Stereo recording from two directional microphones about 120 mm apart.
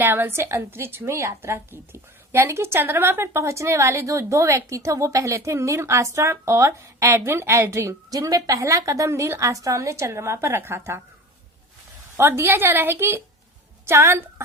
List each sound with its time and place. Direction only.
0.0 s a woman's voice: 15° right (ahead or behind)
12.1 s a woman's voice: 20° right (ahead or behind)